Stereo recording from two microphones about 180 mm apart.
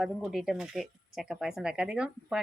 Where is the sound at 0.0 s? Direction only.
Centre (ahead or behind).